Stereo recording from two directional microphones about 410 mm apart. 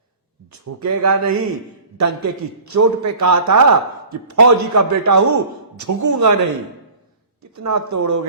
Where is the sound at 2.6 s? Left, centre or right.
Right.